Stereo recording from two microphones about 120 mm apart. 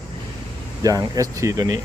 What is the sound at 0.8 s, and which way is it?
Speech, 35° right (ahead or behind).